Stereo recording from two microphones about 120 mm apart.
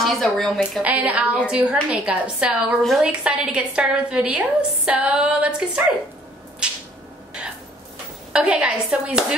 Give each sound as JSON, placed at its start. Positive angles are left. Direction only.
{"t": 0.0, "sound": "speech", "side_deg": 0}
{"t": 0.8, "sound": "a woman's voice", "side_deg": -10}
{"t": 6.6, "sound": "a sound", "side_deg": -10}
{"t": 8.3, "sound": "a woman's voice", "side_deg": -10}